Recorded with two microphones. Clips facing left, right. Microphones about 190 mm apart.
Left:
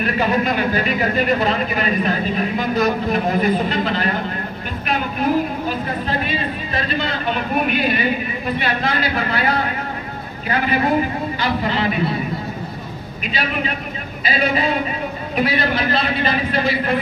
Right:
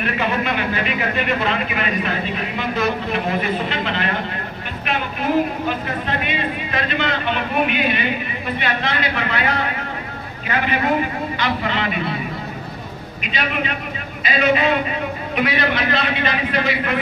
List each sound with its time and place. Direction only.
0.0 s speech: 40° left (ahead or behind)
11.3 s speech: 35° left (ahead or behind)
13.3 s speech: 35° left (ahead or behind)